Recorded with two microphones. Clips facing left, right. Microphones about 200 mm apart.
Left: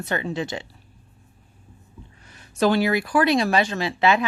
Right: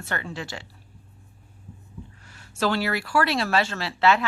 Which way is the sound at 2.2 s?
20° left (ahead or behind).